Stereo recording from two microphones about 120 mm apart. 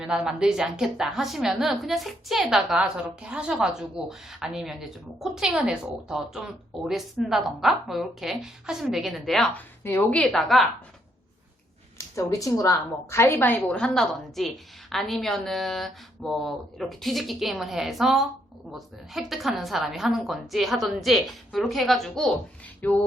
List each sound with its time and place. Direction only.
0.0 s a woman's voice: 5° right (ahead or behind)
11.9 s a woman's voice: 25° left (ahead or behind); by 22.4 s 5° left (ahead or behind)
22.8 s music: 15° left (ahead or behind)